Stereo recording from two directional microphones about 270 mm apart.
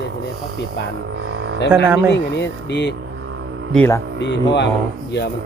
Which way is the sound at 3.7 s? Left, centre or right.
Centre.